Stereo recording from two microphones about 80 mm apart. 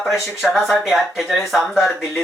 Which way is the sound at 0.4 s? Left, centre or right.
Centre.